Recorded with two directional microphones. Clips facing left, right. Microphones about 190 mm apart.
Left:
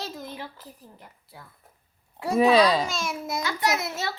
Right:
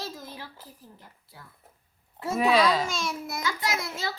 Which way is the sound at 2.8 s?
20° left (ahead or behind).